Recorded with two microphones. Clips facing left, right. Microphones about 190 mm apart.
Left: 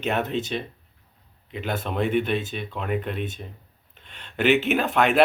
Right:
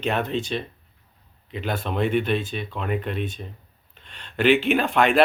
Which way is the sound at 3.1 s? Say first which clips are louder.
Right 2 dB; 50° left (ahead or behind).